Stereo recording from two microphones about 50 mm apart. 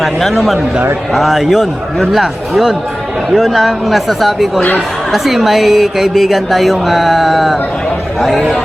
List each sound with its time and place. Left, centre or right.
0.0 s a woman's voice: centre